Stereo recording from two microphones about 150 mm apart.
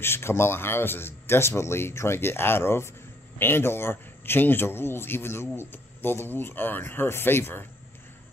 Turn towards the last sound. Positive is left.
turn(degrees=15)  # may be behind; listen again after turning